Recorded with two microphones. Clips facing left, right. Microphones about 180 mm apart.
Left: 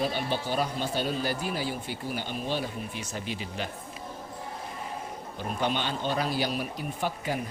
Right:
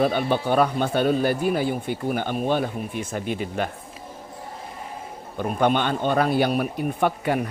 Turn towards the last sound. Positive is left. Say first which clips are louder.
# right 8 dB
turn(degrees=-65)  # may be behind; listen again after turning